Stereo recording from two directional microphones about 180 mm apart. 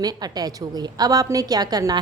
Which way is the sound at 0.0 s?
20° right (ahead or behind).